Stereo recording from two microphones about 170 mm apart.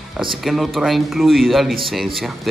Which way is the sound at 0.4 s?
Centre (ahead or behind).